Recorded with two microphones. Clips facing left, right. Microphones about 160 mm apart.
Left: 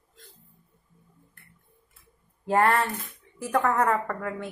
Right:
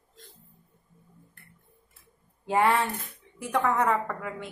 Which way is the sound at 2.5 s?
Centre (ahead or behind).